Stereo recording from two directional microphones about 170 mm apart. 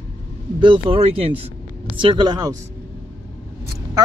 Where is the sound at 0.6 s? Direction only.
30° right (ahead or behind).